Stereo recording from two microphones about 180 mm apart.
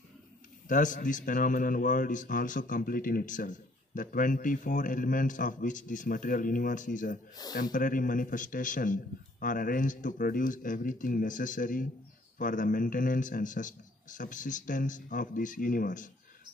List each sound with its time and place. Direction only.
0.7 s a man's voice: 45° left (ahead or behind)
7.4 s speech: 20° left (ahead or behind)
7.7 s a man's voice: 50° left (ahead or behind)